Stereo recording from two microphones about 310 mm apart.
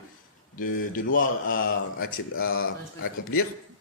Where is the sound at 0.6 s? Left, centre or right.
Left.